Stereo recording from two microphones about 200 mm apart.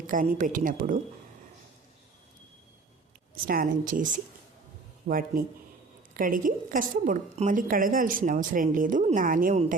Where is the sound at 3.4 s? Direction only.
45° right (ahead or behind).